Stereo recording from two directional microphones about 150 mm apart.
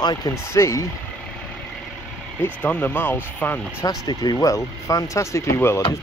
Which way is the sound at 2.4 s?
10° left (ahead or behind).